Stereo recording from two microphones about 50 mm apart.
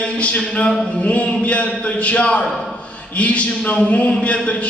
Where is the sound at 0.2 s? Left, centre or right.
Left.